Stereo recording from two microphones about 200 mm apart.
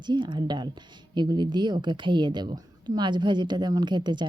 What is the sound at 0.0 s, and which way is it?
Speech, 25° right (ahead or behind).